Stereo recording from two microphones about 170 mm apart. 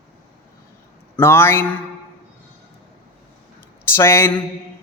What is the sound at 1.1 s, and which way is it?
Speech, 15° left (ahead or behind).